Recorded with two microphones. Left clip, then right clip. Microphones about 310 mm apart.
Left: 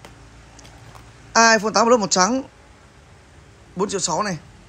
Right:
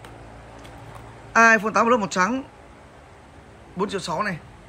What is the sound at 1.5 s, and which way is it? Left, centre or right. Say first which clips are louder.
Speech: left 2 dB; centre.